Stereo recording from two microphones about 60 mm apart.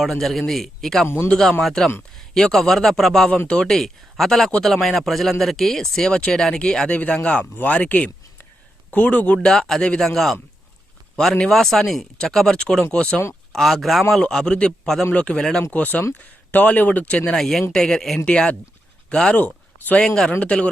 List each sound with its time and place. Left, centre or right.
0.0 s speech: centre
3.2 s speech: left
3.6 s speech: centre; by 9.5 s left
9.5 s speech: centre
11.3 s speech: centre
13.0 s speech: left
13.5 s speech: centre
17.3 s speech: centre
20.0 s speech: centre
20.4 s speech: left